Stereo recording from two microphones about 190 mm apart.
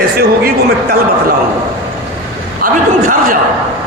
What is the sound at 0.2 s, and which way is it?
Speech, 55° right (ahead or behind).